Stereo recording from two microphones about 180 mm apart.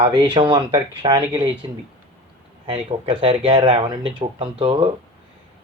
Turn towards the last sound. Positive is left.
turn(degrees=-25)  # may be behind; listen again after turning